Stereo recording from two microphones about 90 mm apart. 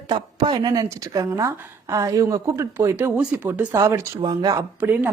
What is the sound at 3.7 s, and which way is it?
Speech, 35° right (ahead or behind).